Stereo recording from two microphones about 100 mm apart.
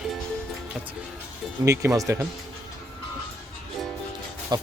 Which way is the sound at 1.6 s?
30° right (ahead or behind).